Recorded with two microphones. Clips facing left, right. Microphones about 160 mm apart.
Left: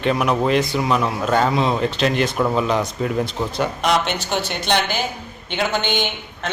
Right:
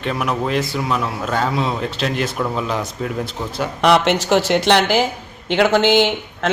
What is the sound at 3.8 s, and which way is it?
Speech, 80° right.